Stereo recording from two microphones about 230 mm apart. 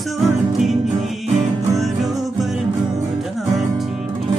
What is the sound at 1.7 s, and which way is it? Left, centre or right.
Music, centre.